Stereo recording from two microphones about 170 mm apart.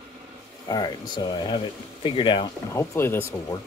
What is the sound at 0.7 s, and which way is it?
Speech, 25° left (ahead or behind).